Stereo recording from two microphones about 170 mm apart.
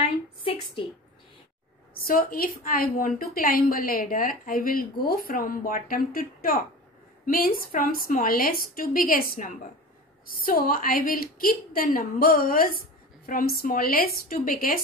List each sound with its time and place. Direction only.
2.0 s a woman's voice: 55° left (ahead or behind)